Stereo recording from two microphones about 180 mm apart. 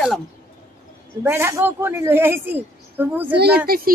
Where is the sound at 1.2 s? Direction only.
15° right (ahead or behind).